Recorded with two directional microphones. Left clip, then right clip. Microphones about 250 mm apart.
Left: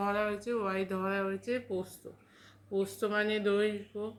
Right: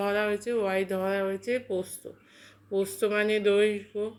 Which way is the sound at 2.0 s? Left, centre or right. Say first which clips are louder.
Right 6 dB; centre.